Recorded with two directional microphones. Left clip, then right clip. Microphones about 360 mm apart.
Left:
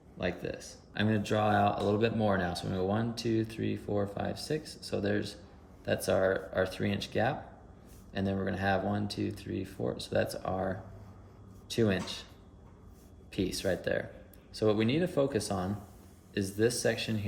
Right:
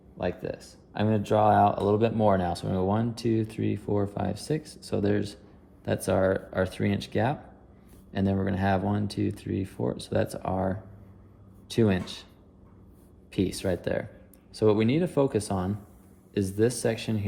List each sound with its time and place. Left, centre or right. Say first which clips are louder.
0.2 s speech: right 4 dB; centre
13.3 s speech: right 3 dB; centre